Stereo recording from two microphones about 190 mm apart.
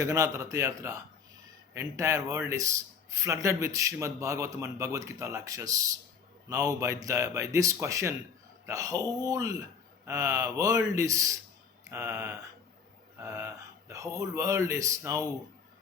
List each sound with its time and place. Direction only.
0.0 s a man's voice: 15° right (ahead or behind)